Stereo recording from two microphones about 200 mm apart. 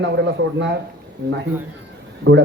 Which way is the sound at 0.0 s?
60° right (ahead or behind).